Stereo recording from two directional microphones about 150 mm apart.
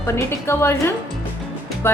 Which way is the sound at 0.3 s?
15° left (ahead or behind).